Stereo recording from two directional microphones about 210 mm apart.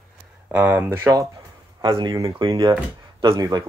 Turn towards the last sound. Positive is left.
turn(degrees=-20)  # may be behind; listen again after turning